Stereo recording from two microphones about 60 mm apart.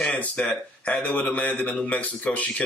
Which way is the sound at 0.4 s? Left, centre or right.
Left.